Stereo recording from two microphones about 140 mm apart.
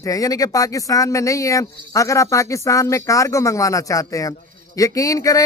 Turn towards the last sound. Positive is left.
turn(degrees=25)  # may be behind; listen again after turning